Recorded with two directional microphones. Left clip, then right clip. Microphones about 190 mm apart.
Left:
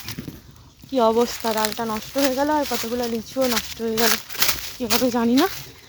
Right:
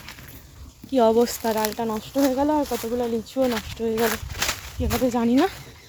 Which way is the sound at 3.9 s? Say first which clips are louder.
Left 4 dB; 65° left (ahead or behind).